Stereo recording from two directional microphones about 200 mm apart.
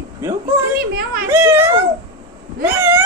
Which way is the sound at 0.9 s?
50° right (ahead or behind).